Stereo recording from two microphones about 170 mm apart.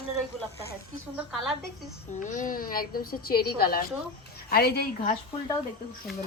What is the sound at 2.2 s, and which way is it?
A woman's voice, 50° left (ahead or behind).